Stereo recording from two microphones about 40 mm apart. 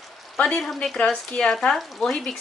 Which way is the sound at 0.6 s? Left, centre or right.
Centre.